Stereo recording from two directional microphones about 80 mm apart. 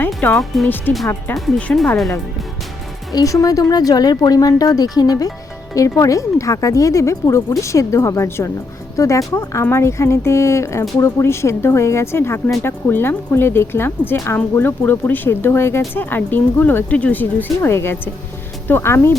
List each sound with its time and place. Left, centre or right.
0.3 s speech: centre
3.1 s speech: left